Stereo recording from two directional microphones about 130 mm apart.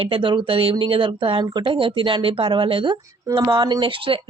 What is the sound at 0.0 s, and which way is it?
A woman's voice, 40° right (ahead or behind).